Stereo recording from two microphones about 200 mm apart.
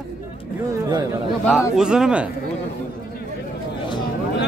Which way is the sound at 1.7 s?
5° right (ahead or behind).